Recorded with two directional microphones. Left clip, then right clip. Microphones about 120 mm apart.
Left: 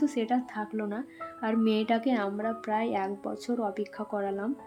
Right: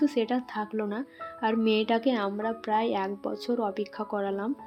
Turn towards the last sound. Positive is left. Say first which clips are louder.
# right 1 dB
turn(degrees=-20)  # may be behind; listen again after turning